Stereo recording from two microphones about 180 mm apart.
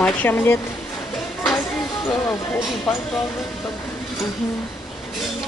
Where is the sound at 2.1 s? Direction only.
15° left (ahead or behind).